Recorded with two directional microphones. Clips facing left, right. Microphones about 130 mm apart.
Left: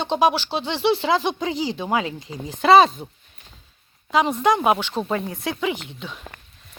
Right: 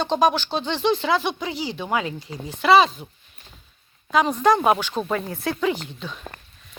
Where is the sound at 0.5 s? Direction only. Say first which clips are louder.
Left 1 dB; 10° left (ahead or behind).